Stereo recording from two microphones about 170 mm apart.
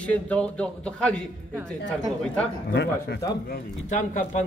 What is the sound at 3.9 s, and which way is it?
Speech, 45° left (ahead or behind).